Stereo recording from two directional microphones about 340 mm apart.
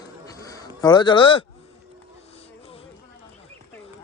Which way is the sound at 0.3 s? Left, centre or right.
Centre.